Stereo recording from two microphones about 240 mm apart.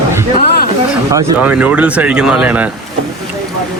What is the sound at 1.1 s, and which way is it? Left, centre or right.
Speech, centre.